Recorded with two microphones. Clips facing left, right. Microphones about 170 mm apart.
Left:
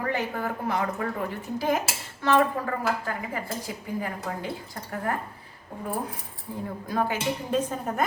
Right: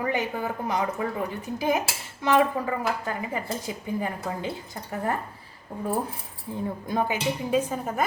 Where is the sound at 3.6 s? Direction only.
20° right (ahead or behind).